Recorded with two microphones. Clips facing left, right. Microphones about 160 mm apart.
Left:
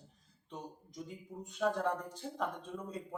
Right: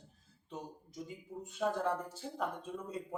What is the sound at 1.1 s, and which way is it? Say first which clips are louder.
Speech: right 1 dB; 5° right (ahead or behind).